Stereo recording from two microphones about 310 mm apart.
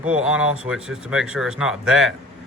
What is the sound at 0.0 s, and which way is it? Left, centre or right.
A man's voice, centre.